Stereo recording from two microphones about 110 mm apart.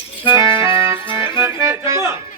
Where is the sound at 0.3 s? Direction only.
25° right (ahead or behind).